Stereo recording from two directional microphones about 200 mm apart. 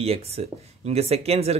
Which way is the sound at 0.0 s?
30° right (ahead or behind).